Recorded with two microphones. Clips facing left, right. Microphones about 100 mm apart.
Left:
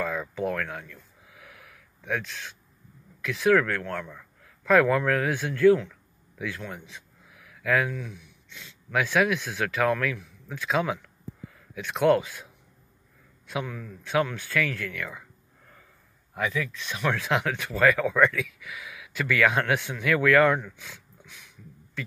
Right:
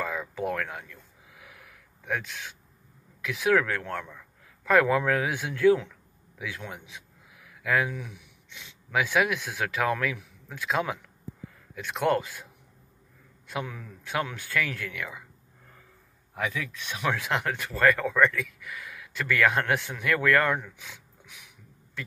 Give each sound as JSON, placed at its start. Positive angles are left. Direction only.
{"t": 0.0, "sound": "a sound", "side_deg": -5}
{"t": 3.2, "sound": "a man's voice", "side_deg": -5}
{"t": 6.6, "sound": "a sound", "side_deg": -5}
{"t": 7.9, "sound": "speech", "side_deg": -10}
{"t": 13.5, "sound": "speech", "side_deg": -5}
{"t": 16.3, "sound": "speech", "side_deg": -5}